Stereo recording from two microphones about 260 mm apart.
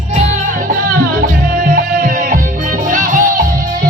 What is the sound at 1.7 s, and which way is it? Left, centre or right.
Music, right.